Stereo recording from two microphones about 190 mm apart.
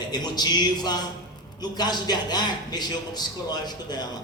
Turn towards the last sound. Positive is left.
turn(degrees=20)  # may be behind; listen again after turning